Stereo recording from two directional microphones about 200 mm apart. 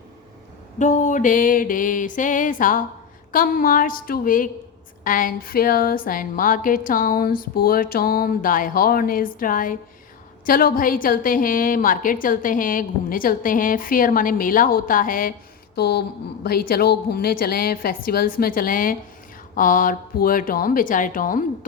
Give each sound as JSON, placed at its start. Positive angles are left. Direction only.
{"t": 0.8, "sound": "a sound", "side_deg": 40}
{"t": 3.3, "sound": "a woman's voice", "side_deg": 45}
{"t": 15.7, "sound": "a woman's voice", "side_deg": 55}